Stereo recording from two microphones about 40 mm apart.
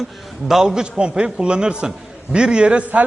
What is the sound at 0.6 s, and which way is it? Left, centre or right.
A man's voice, centre.